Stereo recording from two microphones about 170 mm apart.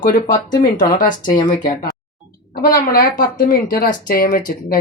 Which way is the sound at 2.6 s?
60° left (ahead or behind).